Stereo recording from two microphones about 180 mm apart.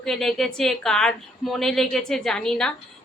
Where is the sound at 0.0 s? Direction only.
Centre (ahead or behind).